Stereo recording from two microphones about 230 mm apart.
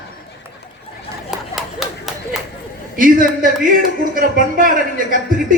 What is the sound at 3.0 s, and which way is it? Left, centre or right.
A man's voice, right.